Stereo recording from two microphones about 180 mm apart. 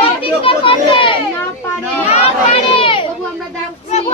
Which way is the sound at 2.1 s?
35° left (ahead or behind).